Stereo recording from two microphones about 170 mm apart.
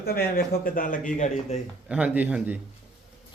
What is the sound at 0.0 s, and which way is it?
Speech, 60° left (ahead or behind).